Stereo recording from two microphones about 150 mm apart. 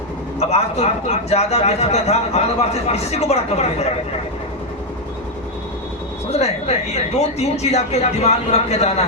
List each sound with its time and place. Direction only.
0.3 s a man's voice: 45° left (ahead or behind)
6.3 s a man's voice: 45° left (ahead or behind)